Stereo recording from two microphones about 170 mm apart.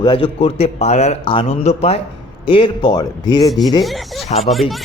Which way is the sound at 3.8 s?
Centre (ahead or behind).